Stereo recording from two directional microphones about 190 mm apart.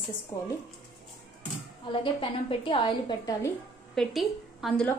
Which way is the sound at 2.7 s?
25° left (ahead or behind).